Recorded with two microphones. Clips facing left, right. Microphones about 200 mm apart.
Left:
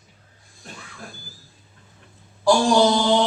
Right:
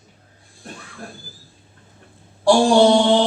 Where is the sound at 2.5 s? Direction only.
30° right (ahead or behind).